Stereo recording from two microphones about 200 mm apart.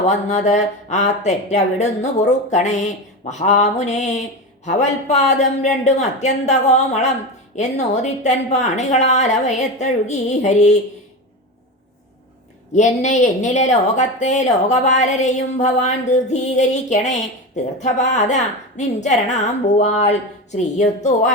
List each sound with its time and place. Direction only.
0.0 s speech: 35° left (ahead or behind)
12.7 s speech: 35° left (ahead or behind)